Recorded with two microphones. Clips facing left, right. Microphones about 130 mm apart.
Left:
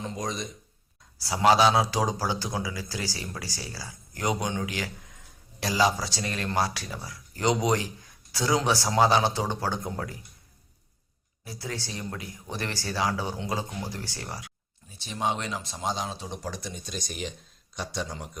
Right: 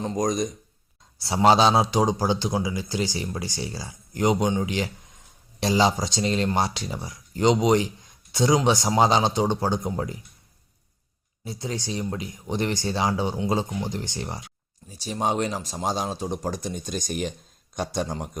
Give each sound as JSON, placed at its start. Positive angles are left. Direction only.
{"t": 0.0, "sound": "speech", "side_deg": -40}
{"t": 1.2, "sound": "a man's voice", "side_deg": -25}
{"t": 11.4, "sound": "a man's voice", "side_deg": -20}
{"t": 14.8, "sound": "speech", "side_deg": -40}